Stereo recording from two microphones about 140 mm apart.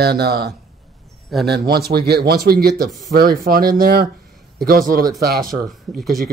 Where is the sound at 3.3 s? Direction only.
90° right.